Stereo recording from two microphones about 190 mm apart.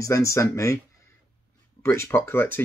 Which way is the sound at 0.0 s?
15° left (ahead or behind).